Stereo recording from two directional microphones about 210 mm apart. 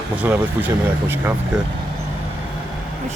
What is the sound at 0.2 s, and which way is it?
Speech, 10° right (ahead or behind).